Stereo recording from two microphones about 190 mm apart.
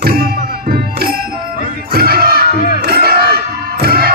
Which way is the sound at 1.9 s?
55° right (ahead or behind).